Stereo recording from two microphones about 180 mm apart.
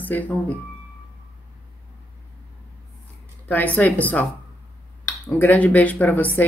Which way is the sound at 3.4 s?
10° left (ahead or behind).